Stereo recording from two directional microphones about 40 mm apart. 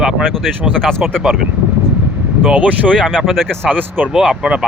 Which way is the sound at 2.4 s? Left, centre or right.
Right.